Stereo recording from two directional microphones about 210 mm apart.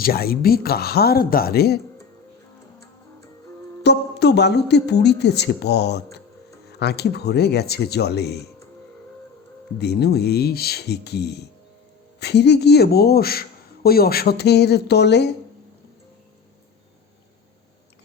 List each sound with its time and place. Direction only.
0.0 s a man's voice: 45° left (ahead or behind)
3.8 s a man's voice: 55° left (ahead or behind)
9.7 s a man's voice: 50° left (ahead or behind)